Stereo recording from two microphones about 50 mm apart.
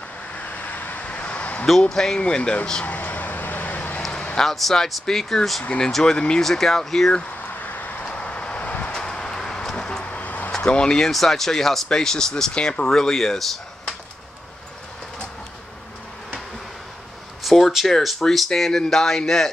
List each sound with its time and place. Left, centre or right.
0.4 s a sound: left
1.8 s speech: centre
2.9 s vehicle: left
4.1 s a sound: left
4.4 s speech: centre
7.6 s vehicle: left
8.0 s vehicle: left
8.9 s vehicle: centre; by 10.5 s left
10.5 s speech: centre
11.0 s speech: centre
17.4 s a sound: centre
17.8 s speech: centre